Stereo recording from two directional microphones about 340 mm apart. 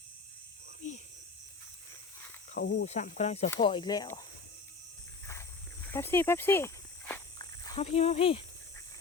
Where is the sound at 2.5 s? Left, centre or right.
Left; by 4.2 s centre.